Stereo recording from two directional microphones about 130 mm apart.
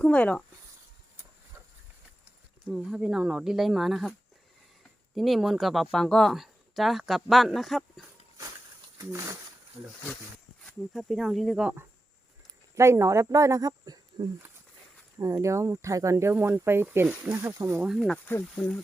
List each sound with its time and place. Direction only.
0.0 s speech: 10° left (ahead or behind)
2.6 s speech: 5° right (ahead or behind)
5.1 s speech: centre (ahead or behind)
10.6 s speech: centre (ahead or behind)
12.7 s speech: 20° right (ahead or behind)
17.7 s speech: 5° right (ahead or behind)
18.3 s speech: 15° left (ahead or behind)